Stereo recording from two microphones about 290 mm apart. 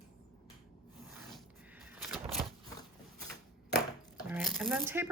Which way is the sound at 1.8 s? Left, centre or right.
Centre.